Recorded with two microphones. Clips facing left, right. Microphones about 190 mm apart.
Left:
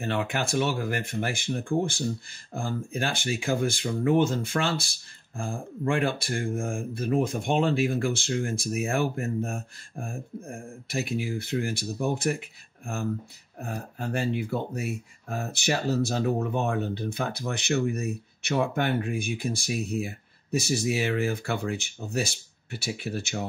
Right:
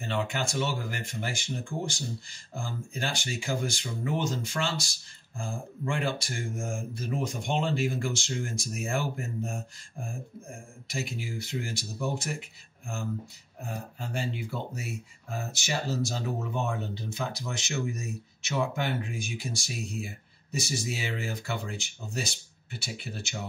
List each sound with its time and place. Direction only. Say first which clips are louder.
0.0 s speech: left 3 dB; 55° left (ahead or behind)